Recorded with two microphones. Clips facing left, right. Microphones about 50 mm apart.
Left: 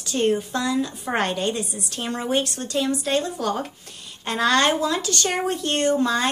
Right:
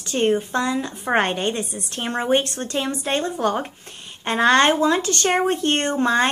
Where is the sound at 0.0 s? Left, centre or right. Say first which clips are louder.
Right 2 dB; right.